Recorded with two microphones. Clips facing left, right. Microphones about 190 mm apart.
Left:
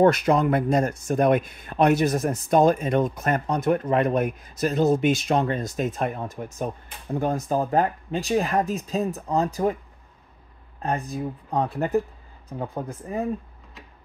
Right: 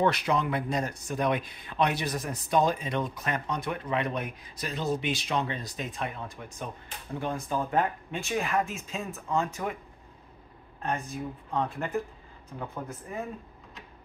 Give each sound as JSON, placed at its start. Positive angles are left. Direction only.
{"t": 0.0, "sound": "speech", "side_deg": 45}
{"t": 10.8, "sound": "speech", "side_deg": 35}